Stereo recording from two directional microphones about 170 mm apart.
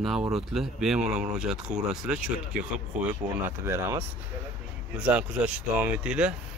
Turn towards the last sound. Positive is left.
turn(degrees=-5)  # may be behind; listen again after turning